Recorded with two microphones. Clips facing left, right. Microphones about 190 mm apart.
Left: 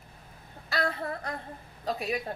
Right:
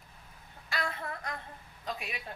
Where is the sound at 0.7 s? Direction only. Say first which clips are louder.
Left 6 dB; 35° left (ahead or behind).